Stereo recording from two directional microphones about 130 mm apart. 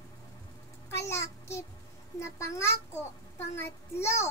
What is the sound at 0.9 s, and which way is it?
A child's voice, 20° left (ahead or behind).